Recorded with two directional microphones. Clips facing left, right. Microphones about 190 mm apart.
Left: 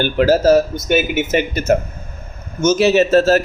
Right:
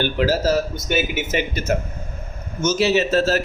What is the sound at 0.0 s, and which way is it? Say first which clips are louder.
Speech: left 6 dB; 50° left (ahead or behind).